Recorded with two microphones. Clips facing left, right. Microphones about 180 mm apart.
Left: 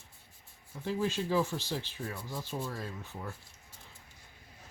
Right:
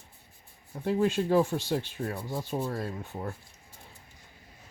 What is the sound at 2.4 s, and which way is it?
Speech, 55° right (ahead or behind).